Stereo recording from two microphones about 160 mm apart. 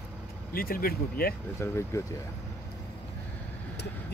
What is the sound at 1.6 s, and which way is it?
Speech, 15° left (ahead or behind).